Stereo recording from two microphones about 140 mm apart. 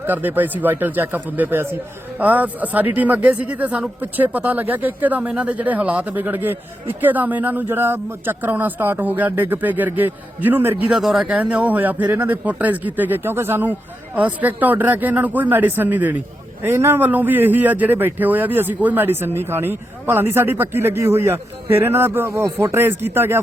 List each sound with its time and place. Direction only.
0.0 s speech: 15° right (ahead or behind)